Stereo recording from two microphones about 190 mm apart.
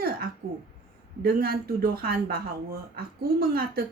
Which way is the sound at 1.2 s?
50° right (ahead or behind).